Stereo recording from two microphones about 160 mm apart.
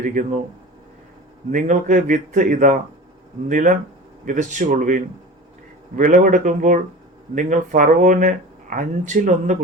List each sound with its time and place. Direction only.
0.0 s speech: 55° right (ahead or behind)
1.5 s speech: 55° right (ahead or behind)
6.0 s speech: 60° right (ahead or behind)